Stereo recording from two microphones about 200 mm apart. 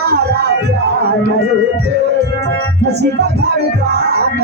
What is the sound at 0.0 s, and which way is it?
Speech, 55° right (ahead or behind).